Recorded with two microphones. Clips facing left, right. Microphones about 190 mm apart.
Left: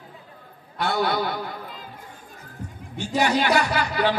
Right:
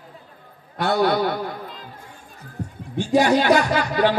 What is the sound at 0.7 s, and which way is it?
Speech, 45° right (ahead or behind).